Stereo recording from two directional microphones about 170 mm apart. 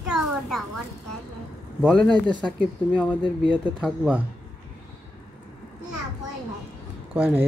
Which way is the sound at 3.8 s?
5° right (ahead or behind).